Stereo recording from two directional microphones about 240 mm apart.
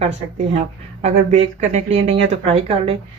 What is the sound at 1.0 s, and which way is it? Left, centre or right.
A woman's voice, right.